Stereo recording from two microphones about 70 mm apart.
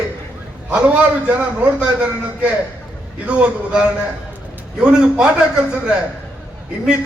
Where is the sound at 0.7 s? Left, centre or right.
Centre.